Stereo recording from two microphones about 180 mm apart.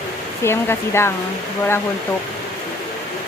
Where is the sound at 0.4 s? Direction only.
15° left (ahead or behind).